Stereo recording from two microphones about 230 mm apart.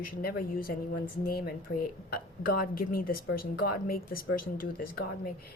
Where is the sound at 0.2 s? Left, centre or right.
Left.